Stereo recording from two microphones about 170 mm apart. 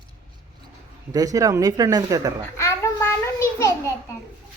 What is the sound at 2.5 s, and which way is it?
A child's voice, 15° left (ahead or behind).